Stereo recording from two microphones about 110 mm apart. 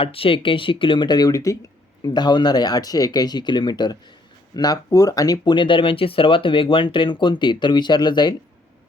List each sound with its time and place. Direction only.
0.0 s speech: 60° left (ahead or behind); by 8.4 s 40° left (ahead or behind)